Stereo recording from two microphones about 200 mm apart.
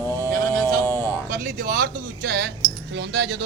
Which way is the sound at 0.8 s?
15° left (ahead or behind).